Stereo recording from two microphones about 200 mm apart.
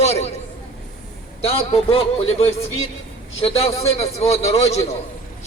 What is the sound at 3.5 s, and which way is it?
A man's voice, 30° left (ahead or behind).